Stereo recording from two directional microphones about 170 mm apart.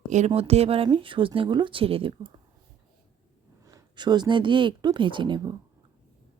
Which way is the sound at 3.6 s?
25° right (ahead or behind).